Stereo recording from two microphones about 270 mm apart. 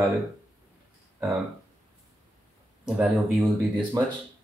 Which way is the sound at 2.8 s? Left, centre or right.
Centre.